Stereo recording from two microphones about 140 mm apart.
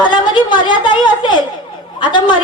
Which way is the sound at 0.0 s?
35° left (ahead or behind).